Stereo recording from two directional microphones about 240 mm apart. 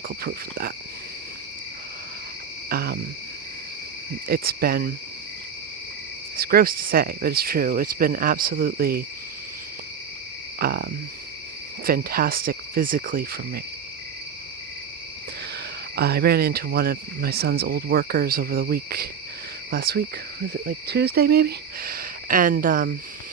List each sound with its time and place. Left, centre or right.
0.1 s speech: right
2.6 s cricket: right
4.3 s speech: right
6.3 s speech: right
10.6 s cricket: right
11.9 s speech: right
16.0 s speech: right